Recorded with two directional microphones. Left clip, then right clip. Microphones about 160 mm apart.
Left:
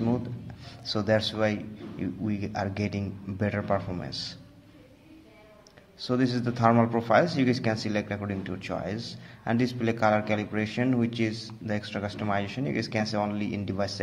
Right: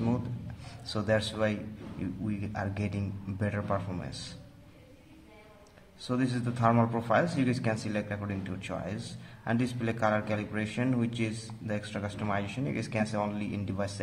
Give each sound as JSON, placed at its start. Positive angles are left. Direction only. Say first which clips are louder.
{"t": 0.8, "sound": "a man's voice", "louder": "left 4 dB", "side_deg": 20}
{"t": 6.0, "sound": "a man's voice", "louder": "left 5 dB", "side_deg": 20}